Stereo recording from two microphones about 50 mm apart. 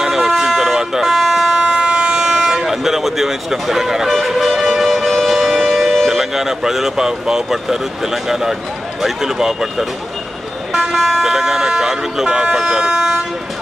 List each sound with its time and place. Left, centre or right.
0.0 s vehicle: centre
1.6 s siren: centre
2.1 s a sound: centre
9.0 s speech: centre
10.7 s vehicle: centre